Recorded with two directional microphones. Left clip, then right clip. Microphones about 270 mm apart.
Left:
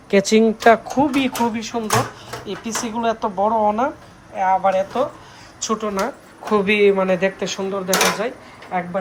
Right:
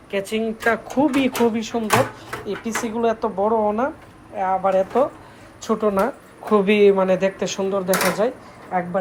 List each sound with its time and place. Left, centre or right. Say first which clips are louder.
0.1 s speech: left 8 dB; centre
0.6 s speech: left 5 dB; centre